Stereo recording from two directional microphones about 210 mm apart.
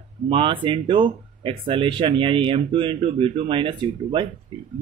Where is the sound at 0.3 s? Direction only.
25° right (ahead or behind).